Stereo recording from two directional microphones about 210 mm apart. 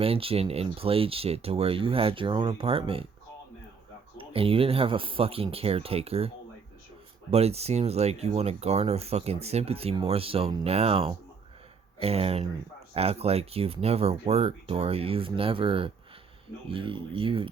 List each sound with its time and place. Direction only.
0.0 s speech: 25° right (ahead or behind)
4.2 s speech: 25° right (ahead or behind)